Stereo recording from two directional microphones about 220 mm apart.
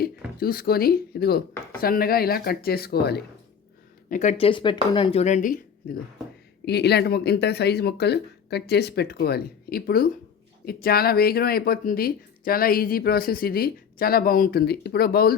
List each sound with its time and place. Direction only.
0.3 s speech: 40° left (ahead or behind)
4.1 s speech: 35° left (ahead or behind)
6.7 s speech: 50° left (ahead or behind)